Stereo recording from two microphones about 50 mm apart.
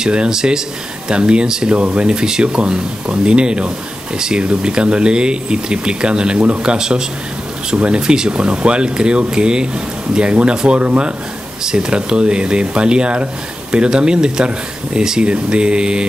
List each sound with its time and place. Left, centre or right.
0.0 s speech: centre
11.6 s speech: centre